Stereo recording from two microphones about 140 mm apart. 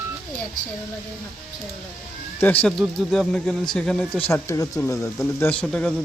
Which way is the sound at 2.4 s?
10° left (ahead or behind).